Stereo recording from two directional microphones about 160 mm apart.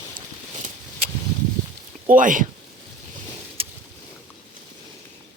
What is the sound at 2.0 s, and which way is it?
Speech, 55° right (ahead or behind).